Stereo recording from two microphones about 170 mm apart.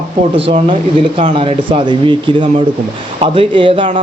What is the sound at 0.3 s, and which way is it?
Speech, 35° right (ahead or behind).